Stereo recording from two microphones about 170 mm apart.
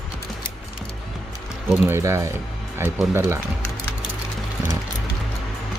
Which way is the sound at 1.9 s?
15° right (ahead or behind).